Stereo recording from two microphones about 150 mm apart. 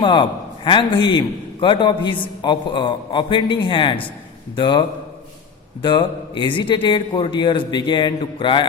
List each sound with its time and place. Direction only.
0.0 s a man's voice: 30° left (ahead or behind)